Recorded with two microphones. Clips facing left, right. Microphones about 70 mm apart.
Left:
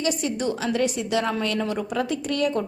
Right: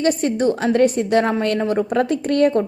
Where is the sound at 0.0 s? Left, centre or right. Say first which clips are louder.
Right 7 dB; right.